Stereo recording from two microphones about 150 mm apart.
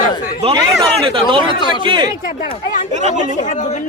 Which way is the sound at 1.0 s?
35° right (ahead or behind).